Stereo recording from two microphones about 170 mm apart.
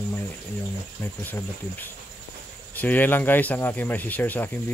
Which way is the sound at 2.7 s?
10° left (ahead or behind).